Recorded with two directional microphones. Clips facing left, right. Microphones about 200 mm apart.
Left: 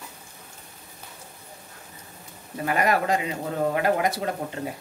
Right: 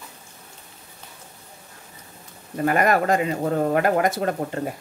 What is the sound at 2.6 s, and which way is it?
Speech, 50° right (ahead or behind).